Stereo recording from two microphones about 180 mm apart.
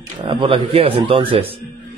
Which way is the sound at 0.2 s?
25° right (ahead or behind).